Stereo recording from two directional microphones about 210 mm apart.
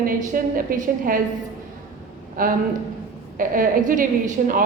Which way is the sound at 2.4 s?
40° right (ahead or behind).